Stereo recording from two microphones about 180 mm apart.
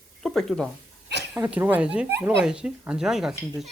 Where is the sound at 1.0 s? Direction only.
70° right (ahead or behind).